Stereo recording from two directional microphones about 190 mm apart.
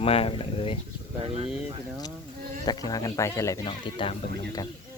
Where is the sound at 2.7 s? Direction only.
20° left (ahead or behind).